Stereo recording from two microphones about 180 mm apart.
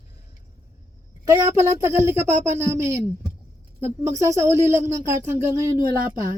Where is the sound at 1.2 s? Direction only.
15° right (ahead or behind).